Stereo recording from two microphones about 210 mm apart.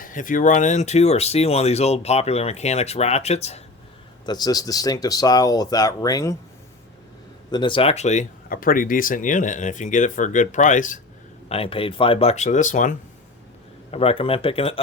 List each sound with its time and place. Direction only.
0.0 s speech: 40° left (ahead or behind)
4.3 s speech: 20° left (ahead or behind)
7.5 s speech: 25° left (ahead or behind)